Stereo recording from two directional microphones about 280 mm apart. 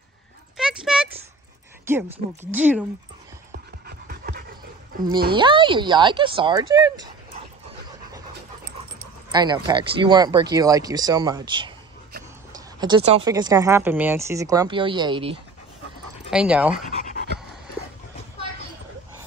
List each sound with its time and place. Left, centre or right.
0.6 s a sound: centre
1.9 s speech: centre
3.8 s pant: right
5.3 s speech: centre
9.3 s speech: centre
16.3 s speech: centre
16.9 s pant: left